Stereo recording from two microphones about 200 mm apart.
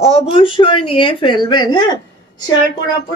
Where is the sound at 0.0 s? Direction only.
30° left (ahead or behind).